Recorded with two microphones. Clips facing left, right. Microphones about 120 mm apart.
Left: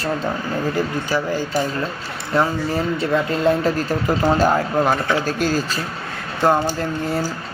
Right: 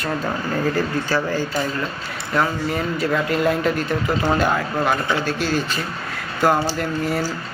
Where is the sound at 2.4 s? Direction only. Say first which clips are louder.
Left 2 dB; 25° left (ahead or behind); by 5.8 s 40° left (ahead or behind).